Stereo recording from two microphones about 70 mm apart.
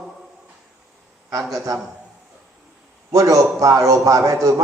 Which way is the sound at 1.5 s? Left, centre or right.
Right.